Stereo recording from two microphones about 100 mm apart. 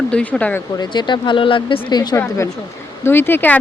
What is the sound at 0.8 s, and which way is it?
Speech, 50° left (ahead or behind).